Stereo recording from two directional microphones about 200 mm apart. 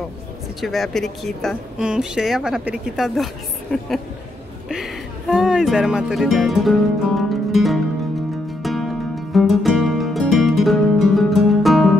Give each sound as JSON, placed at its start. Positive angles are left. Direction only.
{"t": 0.6, "sound": "speech", "side_deg": 0}
{"t": 4.6, "sound": "speech", "side_deg": -5}
{"t": 8.6, "sound": "music", "side_deg": 0}